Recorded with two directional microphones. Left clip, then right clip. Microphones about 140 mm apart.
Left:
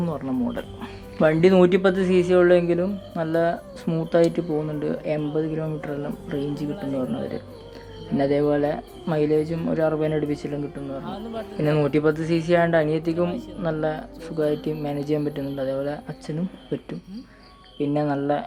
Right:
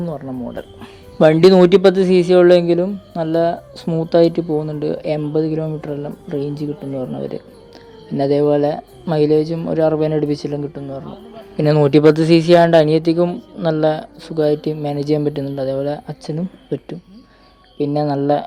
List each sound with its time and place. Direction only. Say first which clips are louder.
0.0 s speech: right 1 dB; 20° right (ahead or behind)
1.2 s a man's voice: right 7 dB; 50° right (ahead or behind); by 7.0 s 30° right (ahead or behind)
8.2 s speech: right 6 dB; 35° right (ahead or behind)
11.5 s speech: right 9 dB; 50° right (ahead or behind)